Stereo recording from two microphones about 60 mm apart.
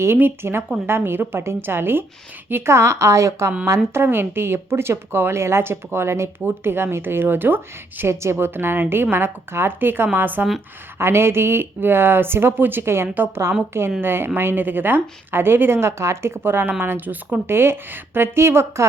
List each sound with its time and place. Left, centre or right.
0.0 s a woman's voice: right
3.9 s a woman's voice: right
8.0 s a woman's voice: right
10.9 s a woman's voice: right
13.1 s a woman's voice: right